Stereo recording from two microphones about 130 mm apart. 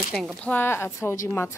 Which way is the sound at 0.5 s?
20° left (ahead or behind).